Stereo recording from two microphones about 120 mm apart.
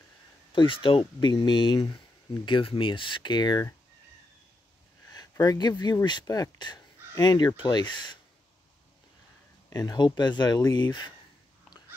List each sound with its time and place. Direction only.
0.5 s speech: 45° left (ahead or behind)
5.1 s speech: 35° left (ahead or behind)
9.7 s speech: 30° left (ahead or behind)